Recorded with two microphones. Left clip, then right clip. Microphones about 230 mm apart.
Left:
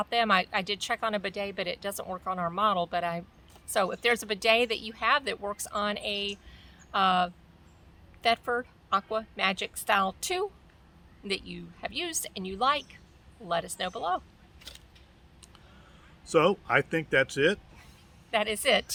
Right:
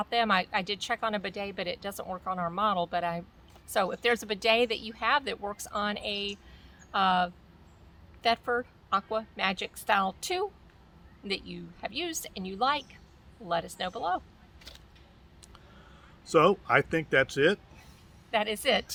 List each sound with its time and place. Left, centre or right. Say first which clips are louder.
0.0 s a woman's voice: left 1 dB; centre
14.7 s a sound: left 3 dB; centre
16.2 s speech: right 1 dB; centre
18.3 s a woman's voice: left 1 dB; centre